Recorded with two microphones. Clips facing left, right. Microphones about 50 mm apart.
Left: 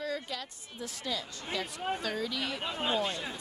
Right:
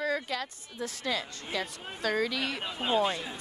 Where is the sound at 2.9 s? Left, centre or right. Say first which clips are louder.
Right 9 dB; right.